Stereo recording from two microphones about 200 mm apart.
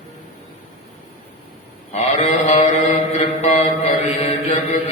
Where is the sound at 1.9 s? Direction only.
30° left (ahead or behind).